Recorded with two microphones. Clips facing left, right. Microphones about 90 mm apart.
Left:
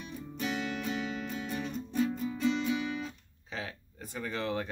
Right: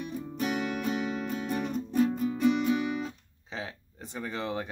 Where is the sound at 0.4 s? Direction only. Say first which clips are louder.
Right 4 dB; 50° right (ahead or behind).